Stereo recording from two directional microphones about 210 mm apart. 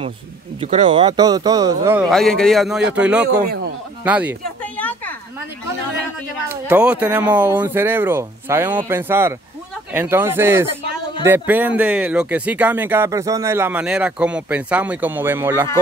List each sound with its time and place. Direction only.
0.6 s speech: 30° right (ahead or behind); by 2.0 s 15° right (ahead or behind)
2.0 s a man's voice: centre (ahead or behind)
4.7 s a sound: 5° left (ahead or behind)
6.5 s speech: 10° right (ahead or behind)